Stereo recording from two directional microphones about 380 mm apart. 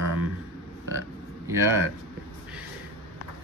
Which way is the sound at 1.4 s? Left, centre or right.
Centre.